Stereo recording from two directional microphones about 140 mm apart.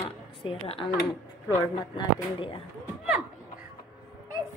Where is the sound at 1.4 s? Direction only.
35° left (ahead or behind).